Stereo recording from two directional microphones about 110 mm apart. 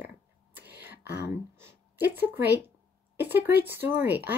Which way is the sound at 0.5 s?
20° right (ahead or behind).